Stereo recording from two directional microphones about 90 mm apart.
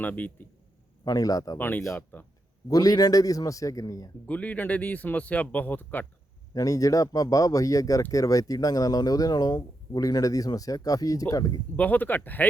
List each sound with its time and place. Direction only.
0.0 s speech: 20° left (ahead or behind)
1.0 s speech: 45° left (ahead or behind)
1.5 s speech: 20° left (ahead or behind)
2.6 s speech: 45° left (ahead or behind)
4.3 s speech: 15° left (ahead or behind)
6.5 s speech: 40° left (ahead or behind)
11.8 s speech: 20° left (ahead or behind)